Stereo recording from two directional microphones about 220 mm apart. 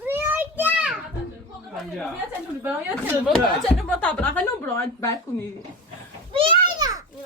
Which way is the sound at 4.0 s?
5° left (ahead or behind).